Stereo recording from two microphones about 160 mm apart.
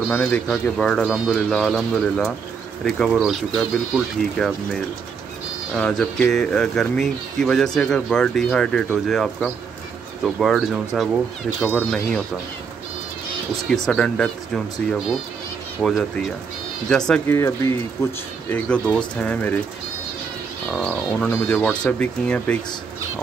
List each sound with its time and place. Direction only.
0.1 s speech: 10° left (ahead or behind)
13.7 s speech: 5° left (ahead or behind)
17.3 s speech: 15° left (ahead or behind)
20.6 s speech: 5° left (ahead or behind)